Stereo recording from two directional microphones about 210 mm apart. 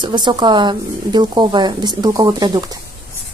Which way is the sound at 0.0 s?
20° right (ahead or behind).